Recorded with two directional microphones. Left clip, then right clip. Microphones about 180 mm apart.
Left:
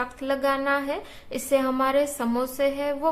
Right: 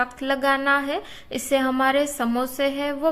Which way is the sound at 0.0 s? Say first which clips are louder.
Right 3 dB; 20° right (ahead or behind).